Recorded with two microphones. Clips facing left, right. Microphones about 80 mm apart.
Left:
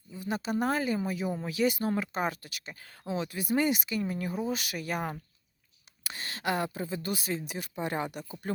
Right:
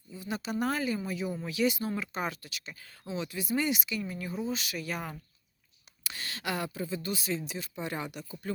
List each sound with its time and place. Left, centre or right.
0.1 s speech: left